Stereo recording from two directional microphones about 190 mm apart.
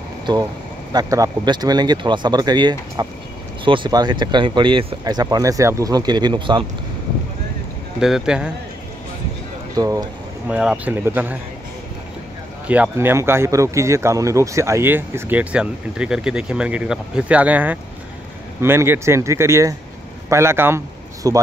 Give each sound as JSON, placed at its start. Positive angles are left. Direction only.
{"t": 0.9, "sound": "speech", "side_deg": -20}
{"t": 8.0, "sound": "speech", "side_deg": -5}
{"t": 9.8, "sound": "speech", "side_deg": -20}
{"t": 10.5, "sound": "speech", "side_deg": -5}
{"t": 12.6, "sound": "speech", "side_deg": -10}